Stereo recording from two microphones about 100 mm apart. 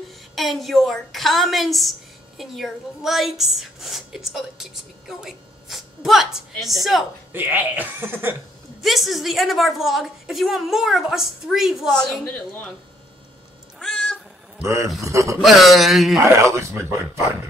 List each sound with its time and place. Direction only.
0.4 s a woman's voice: centre (ahead or behind)
7.3 s speech: 20° right (ahead or behind)
8.8 s a woman's voice: centre (ahead or behind)
11.9 s a woman's voice: 5° left (ahead or behind)
13.7 s cat: 10° left (ahead or behind)
14.6 s a man's voice: 30° right (ahead or behind)
15.4 s a woman's voice: centre (ahead or behind)
16.3 s speech: 30° right (ahead or behind)